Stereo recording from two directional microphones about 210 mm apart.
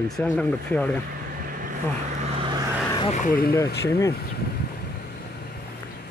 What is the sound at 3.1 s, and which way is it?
Speech, 40° left (ahead or behind).